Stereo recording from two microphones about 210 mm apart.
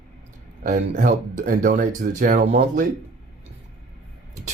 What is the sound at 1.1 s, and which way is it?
Speech, 35° right (ahead or behind).